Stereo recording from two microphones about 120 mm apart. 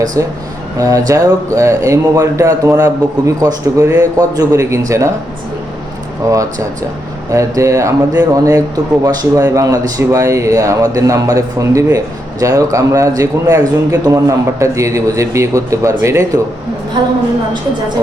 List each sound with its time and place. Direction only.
0.2 s speech: 25° right (ahead or behind)
7.3 s speech: 25° right (ahead or behind)